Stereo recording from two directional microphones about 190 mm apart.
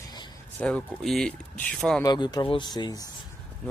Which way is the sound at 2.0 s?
20° left (ahead or behind).